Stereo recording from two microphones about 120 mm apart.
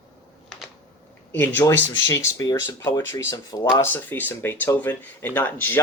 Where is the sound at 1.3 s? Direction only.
15° left (ahead or behind).